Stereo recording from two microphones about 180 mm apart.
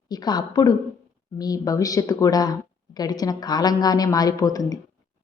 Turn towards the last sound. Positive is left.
turn(degrees=20)  # may be behind; listen again after turning